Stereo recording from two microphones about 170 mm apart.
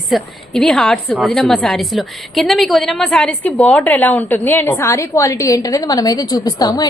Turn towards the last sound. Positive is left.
turn(degrees=25)  # may be behind; listen again after turning